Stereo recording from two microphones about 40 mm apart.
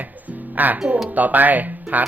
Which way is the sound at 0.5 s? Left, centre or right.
Right.